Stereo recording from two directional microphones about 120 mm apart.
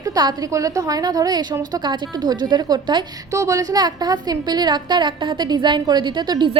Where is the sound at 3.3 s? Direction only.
25° right (ahead or behind).